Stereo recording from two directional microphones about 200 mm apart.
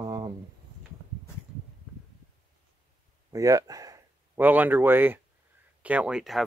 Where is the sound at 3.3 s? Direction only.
15° right (ahead or behind).